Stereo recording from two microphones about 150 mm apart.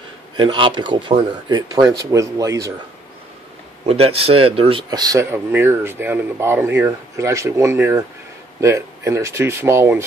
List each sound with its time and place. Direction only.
0.4 s speech: 30° right (ahead or behind)
3.8 s speech: 40° right (ahead or behind); by 10.0 s 15° right (ahead or behind)